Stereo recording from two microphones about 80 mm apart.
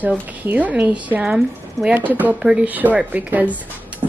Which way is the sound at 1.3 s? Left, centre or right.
Centre.